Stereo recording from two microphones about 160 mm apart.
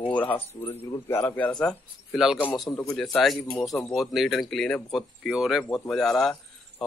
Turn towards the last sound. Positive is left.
turn(degrees=5)  # may be behind; listen again after turning